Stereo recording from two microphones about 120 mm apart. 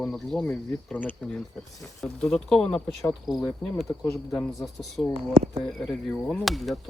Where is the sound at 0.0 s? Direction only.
5° left (ahead or behind).